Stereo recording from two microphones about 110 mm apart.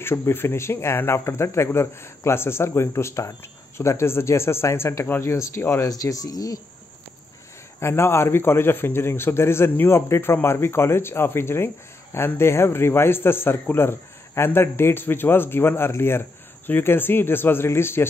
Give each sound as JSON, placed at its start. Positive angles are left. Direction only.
{"t": 0.0, "sound": "a man's voice", "side_deg": 25}
{"t": 7.8, "sound": "a man's voice", "side_deg": 25}